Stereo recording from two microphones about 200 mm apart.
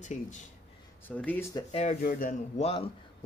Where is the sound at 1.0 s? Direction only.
5° left (ahead or behind).